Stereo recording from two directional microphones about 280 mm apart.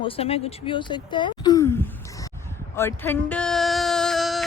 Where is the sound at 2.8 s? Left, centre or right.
Centre.